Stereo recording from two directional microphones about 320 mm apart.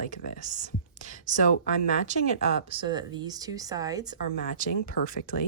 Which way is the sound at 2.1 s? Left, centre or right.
Right.